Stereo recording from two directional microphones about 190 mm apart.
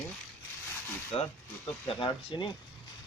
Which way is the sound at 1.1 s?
30° left (ahead or behind).